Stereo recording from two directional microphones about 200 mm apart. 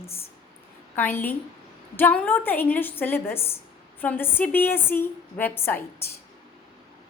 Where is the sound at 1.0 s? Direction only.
10° left (ahead or behind).